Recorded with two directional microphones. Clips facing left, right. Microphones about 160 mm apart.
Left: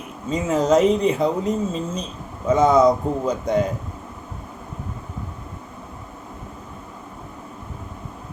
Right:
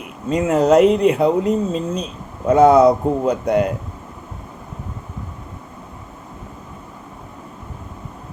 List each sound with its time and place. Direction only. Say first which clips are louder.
0.3 s speech: right 4 dB; 65° right (ahead or behind)